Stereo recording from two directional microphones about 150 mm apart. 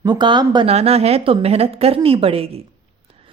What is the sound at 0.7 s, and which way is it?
A woman's voice, 45° right (ahead or behind).